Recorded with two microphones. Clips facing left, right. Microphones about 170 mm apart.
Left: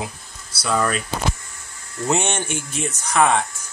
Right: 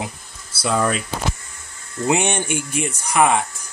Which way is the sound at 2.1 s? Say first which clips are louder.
Right 2 dB; 15° right (ahead or behind).